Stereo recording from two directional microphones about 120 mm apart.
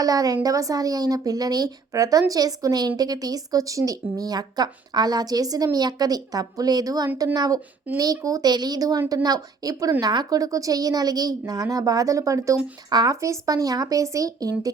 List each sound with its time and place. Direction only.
0.0 s a woman's voice: 30° right (ahead or behind)